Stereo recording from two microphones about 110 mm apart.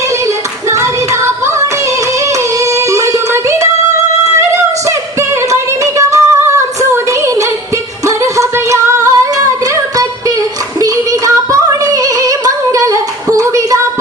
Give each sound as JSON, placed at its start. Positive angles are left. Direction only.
{"t": 0.7, "sound": "music", "side_deg": -25}
{"t": 4.2, "sound": "a sound", "side_deg": -25}
{"t": 5.5, "sound": "singing", "side_deg": -30}
{"t": 8.0, "sound": "music", "side_deg": -30}
{"t": 11.5, "sound": "female singing", "side_deg": -30}